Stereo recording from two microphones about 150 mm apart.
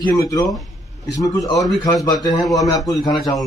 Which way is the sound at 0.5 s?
Centre (ahead or behind).